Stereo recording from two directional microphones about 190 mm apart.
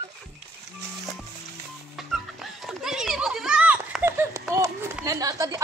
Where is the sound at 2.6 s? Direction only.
5° right (ahead or behind).